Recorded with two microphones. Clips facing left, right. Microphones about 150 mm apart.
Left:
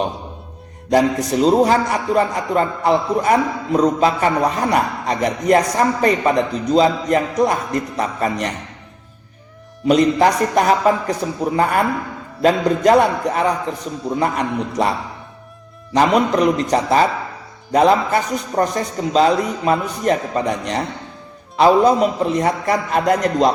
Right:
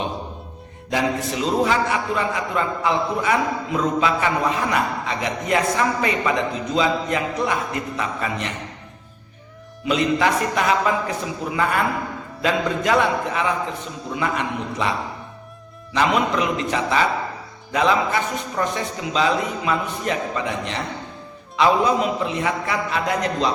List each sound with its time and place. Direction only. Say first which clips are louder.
0.9 s a man's voice: left 7 dB; 40° left (ahead or behind)
9.8 s a man's voice: left 6 dB; 40° left (ahead or behind)